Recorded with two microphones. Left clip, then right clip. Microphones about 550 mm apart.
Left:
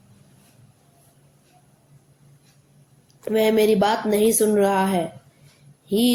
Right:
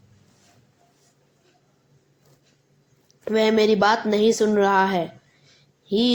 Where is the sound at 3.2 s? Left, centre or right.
Left.